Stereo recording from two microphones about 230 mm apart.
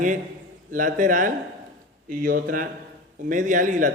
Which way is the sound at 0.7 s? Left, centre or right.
Right.